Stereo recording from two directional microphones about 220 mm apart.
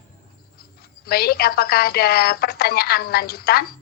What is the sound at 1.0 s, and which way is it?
A woman's voice, 45° left (ahead or behind).